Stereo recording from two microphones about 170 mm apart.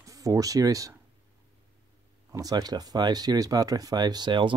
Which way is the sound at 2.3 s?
20° right (ahead or behind).